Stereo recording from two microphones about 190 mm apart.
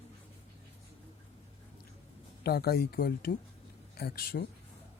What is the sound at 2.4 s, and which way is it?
Speech, 55° left (ahead or behind).